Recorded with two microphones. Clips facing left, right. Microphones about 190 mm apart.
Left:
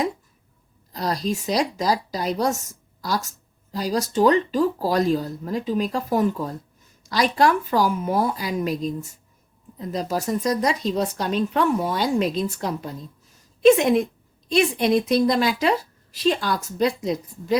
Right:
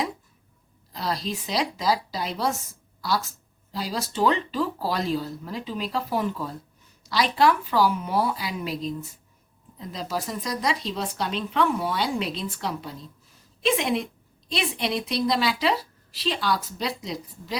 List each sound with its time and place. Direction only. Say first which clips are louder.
0.9 s a woman's voice: left 4 dB; 45° left (ahead or behind)